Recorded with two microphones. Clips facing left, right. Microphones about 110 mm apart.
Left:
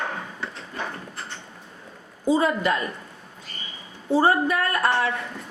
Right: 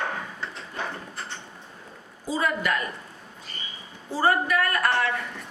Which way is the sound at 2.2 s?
25° left (ahead or behind).